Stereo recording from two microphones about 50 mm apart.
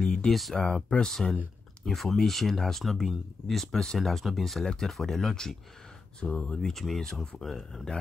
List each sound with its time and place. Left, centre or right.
0.0 s a sound: centre
0.3 s speech: centre
0.6 s speech: centre
1.9 s speech: centre
6.8 s speech: centre